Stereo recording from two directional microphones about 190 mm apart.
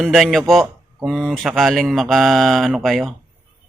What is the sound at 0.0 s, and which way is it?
Speech, centre (ahead or behind).